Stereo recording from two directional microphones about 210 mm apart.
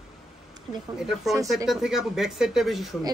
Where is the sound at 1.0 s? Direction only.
Centre (ahead or behind).